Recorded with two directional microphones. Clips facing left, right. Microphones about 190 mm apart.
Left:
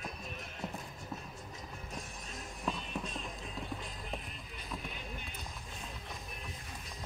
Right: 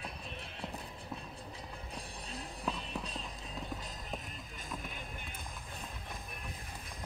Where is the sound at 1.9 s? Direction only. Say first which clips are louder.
Right 2 dB; 35° right (ahead or behind).